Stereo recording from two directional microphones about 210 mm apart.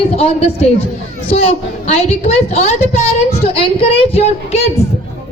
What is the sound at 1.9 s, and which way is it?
A woman's voice, 30° left (ahead or behind).